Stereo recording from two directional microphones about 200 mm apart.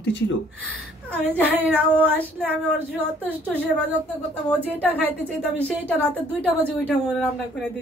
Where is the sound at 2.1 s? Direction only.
5° left (ahead or behind).